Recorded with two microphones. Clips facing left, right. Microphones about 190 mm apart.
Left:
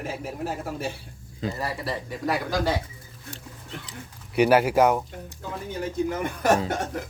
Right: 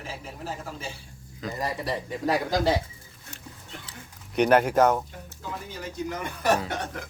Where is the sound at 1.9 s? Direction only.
20° right (ahead or behind).